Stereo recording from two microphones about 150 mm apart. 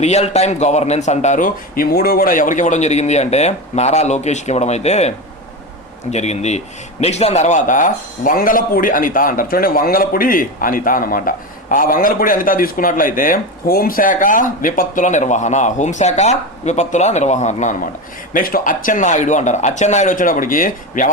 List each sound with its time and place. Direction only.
0.0 s a man's voice: 45° left (ahead or behind)
18.3 s a man's voice: 70° left (ahead or behind)